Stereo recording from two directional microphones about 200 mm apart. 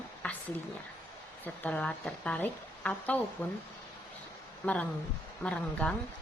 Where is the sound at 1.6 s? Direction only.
5° left (ahead or behind).